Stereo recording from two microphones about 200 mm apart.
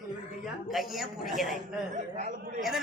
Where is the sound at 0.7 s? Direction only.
Centre (ahead or behind).